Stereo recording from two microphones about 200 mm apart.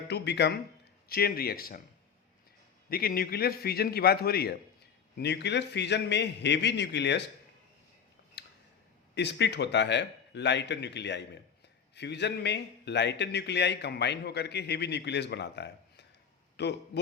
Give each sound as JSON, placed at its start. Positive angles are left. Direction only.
{"t": 0.1, "sound": "a man's voice", "side_deg": 55}
{"t": 2.9, "sound": "a man's voice", "side_deg": 50}
{"t": 8.4, "sound": "a sound", "side_deg": 60}
{"t": 9.1, "sound": "a man's voice", "side_deg": 60}